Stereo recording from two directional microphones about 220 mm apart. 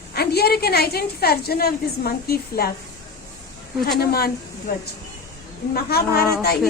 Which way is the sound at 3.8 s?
45° left (ahead or behind).